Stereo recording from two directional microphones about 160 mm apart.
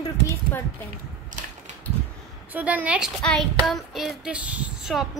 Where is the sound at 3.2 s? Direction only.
5° left (ahead or behind).